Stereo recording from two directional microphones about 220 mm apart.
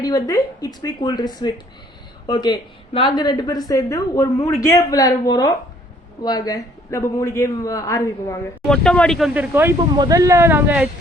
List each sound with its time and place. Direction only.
0.0 s a woman's voice: 15° left (ahead or behind)
8.6 s speech: 5° left (ahead or behind)